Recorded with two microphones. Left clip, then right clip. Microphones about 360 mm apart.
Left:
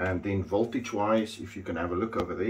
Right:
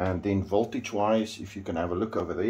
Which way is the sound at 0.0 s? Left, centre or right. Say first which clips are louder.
Right 2 dB; right.